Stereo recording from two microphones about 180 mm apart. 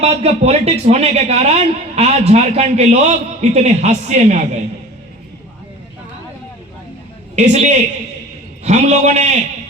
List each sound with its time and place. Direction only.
0.0 s a man's voice: 35° right (ahead or behind)
7.3 s a man's voice: 40° right (ahead or behind)